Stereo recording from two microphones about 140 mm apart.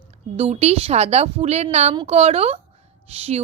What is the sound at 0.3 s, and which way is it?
A woman's voice, 45° right (ahead or behind).